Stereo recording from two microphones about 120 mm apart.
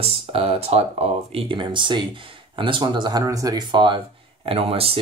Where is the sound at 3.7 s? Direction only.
45° right (ahead or behind).